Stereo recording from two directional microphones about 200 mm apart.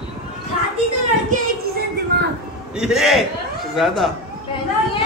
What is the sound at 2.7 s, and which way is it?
A man's voice, centre (ahead or behind).